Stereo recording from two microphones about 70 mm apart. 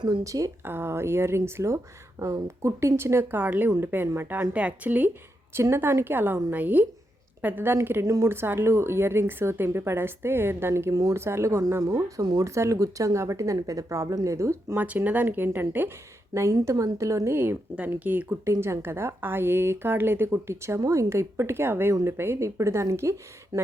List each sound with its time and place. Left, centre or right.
0.3 s speech: right
0.6 s a woman's voice: right
4.5 s speech: right
5.7 s a woman's voice: right
8.0 s a woman's voice: right
12.2 s speech: right
12.5 s speech: right
14.8 s speech: right
16.3 s speech: right
17.3 s speech: right
18.6 s a woman's voice: right